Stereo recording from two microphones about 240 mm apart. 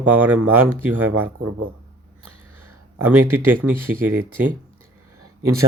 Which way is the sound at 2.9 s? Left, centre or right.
Centre.